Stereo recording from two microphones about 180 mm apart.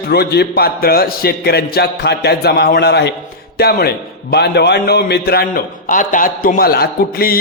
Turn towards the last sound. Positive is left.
turn(degrees=55)  # may be behind; listen again after turning